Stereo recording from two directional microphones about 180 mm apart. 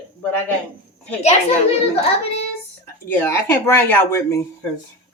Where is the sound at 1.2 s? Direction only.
40° left (ahead or behind).